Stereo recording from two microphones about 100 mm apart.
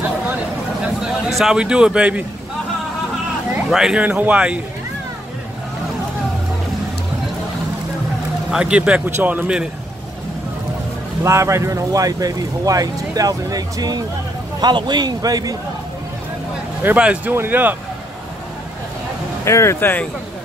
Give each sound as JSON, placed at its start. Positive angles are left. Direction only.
{"t": 1.0, "sound": "speech", "side_deg": -5}
{"t": 3.7, "sound": "a man's voice", "side_deg": -5}
{"t": 8.5, "sound": "a man's voice", "side_deg": -10}
{"t": 11.2, "sound": "a man's voice", "side_deg": -30}
{"t": 16.8, "sound": "a man's voice", "side_deg": -15}
{"t": 19.4, "sound": "speech", "side_deg": 30}